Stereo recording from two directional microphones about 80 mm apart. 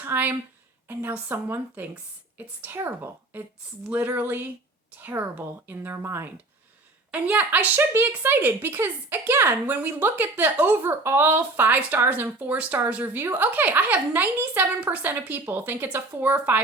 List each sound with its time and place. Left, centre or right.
0.0 s speech: right
7.1 s speech: centre